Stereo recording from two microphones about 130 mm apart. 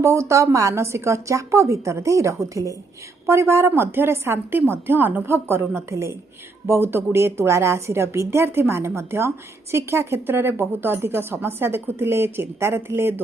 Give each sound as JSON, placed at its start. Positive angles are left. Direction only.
{"t": 0.0, "sound": "a woman's voice", "side_deg": -20}